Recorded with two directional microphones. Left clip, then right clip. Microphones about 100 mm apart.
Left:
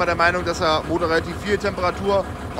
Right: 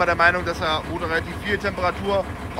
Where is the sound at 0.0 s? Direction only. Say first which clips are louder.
Right 1 dB; 30° left (ahead or behind).